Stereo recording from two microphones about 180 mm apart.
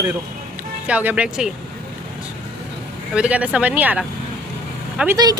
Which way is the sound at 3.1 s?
5° right (ahead or behind).